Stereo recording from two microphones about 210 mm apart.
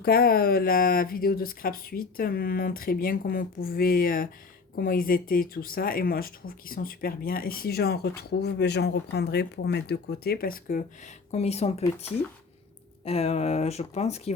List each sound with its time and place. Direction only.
0.0 s speech: 45° left (ahead or behind)
11.3 s speech: 30° left (ahead or behind)
13.1 s speech: 30° left (ahead or behind)